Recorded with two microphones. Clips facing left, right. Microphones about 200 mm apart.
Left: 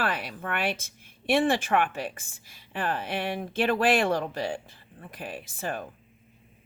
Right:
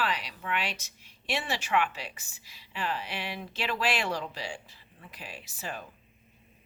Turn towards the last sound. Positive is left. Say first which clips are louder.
# left 6 dB
turn(degrees=50)  # may be behind; listen again after turning